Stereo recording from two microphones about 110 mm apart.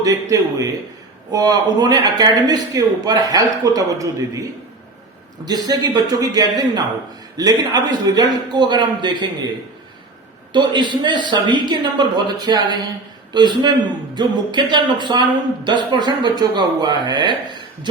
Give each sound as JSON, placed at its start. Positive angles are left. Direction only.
{"t": 0.0, "sound": "speech", "side_deg": -30}
{"t": 5.5, "sound": "speech", "side_deg": -35}
{"t": 10.5, "sound": "speech", "side_deg": -45}